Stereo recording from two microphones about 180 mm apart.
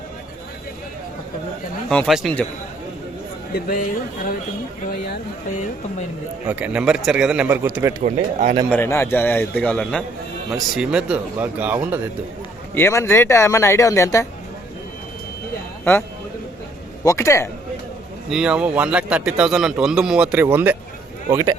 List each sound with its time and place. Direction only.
1.9 s a man's voice: centre (ahead or behind)
3.5 s speech: 50° left (ahead or behind)
6.5 s a man's voice: 5° right (ahead or behind)
8.0 s speech: 45° right (ahead or behind)
8.7 s a man's voice: 15° left (ahead or behind); by 11.9 s 10° right (ahead or behind)
12.7 s speech: 15° left (ahead or behind)
15.8 s a man's voice: 10° left (ahead or behind)
18.3 s a man's voice: 5° right (ahead or behind)